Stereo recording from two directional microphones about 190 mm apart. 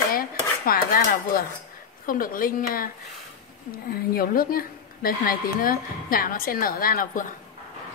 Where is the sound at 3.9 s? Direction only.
50° left (ahead or behind).